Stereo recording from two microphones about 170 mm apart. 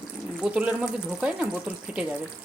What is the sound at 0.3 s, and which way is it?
Speech, 5° right (ahead or behind).